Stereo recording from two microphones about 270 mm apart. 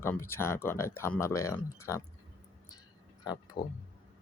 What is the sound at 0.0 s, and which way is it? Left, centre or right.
Speech, centre.